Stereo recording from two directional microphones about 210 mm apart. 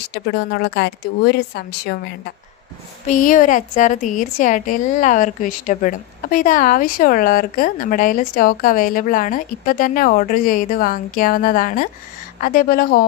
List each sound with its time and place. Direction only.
0.1 s a woman's voice: 50° left (ahead or behind)
3.1 s a woman's voice: 40° left (ahead or behind)